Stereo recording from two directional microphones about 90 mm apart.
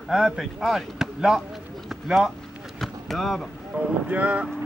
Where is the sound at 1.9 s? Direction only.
5° right (ahead or behind).